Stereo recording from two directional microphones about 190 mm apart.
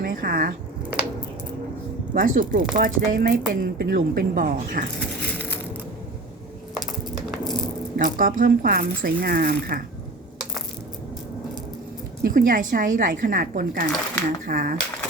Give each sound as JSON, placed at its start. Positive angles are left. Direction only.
{"t": 0.0, "sound": "speech", "side_deg": -50}
{"t": 2.1, "sound": "a woman's voice", "side_deg": -45}
{"t": 4.9, "sound": "a sound", "side_deg": 10}
{"t": 7.3, "sound": "rattle", "side_deg": 0}
{"t": 7.9, "sound": "a woman's voice", "side_deg": -45}
{"t": 12.2, "sound": "a woman's voice", "side_deg": -45}